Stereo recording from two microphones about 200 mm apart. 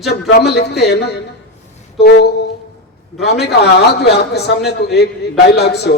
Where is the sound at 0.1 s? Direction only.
55° left (ahead or behind).